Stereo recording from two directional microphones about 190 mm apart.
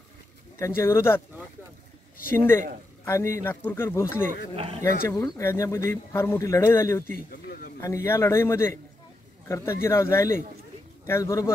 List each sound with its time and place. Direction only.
0.6 s speech: 15° left (ahead or behind)
2.3 s speech: 10° left (ahead or behind)
4.6 s speech: 30° right (ahead or behind)
5.4 s speech: 15° left (ahead or behind)
7.2 s a sound: 50° left (ahead or behind)
7.8 s speech: 15° left (ahead or behind)